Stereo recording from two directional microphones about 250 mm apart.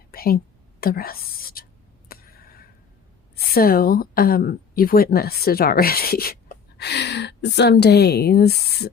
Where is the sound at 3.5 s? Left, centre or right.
Left.